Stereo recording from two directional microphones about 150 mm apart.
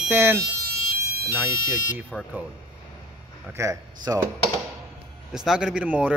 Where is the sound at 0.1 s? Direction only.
15° right (ahead or behind).